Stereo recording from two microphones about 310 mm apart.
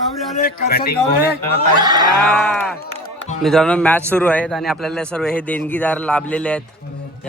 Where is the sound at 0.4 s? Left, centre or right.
Left.